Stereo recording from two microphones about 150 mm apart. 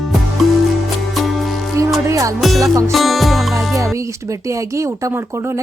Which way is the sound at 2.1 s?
20° right (ahead or behind).